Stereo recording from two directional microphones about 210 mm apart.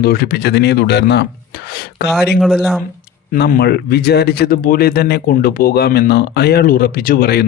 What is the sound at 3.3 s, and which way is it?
Speech, 50° left (ahead or behind).